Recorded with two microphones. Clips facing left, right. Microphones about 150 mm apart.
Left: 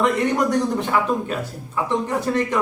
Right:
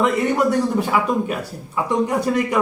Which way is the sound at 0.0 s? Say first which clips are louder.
Right 1 dB; 5° right (ahead or behind).